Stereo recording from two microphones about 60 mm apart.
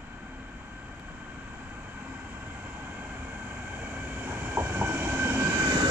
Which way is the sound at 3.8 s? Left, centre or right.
Right.